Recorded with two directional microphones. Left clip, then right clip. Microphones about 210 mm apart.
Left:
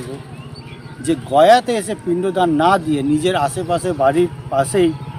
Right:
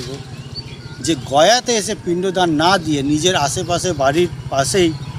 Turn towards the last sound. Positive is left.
turn(degrees=0)  # may be behind; listen again after turning